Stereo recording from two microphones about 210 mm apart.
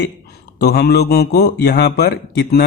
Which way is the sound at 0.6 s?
50° left (ahead or behind).